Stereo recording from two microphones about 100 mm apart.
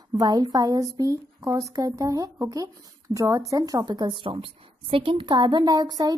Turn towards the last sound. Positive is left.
turn(degrees=-40)  # may be behind; listen again after turning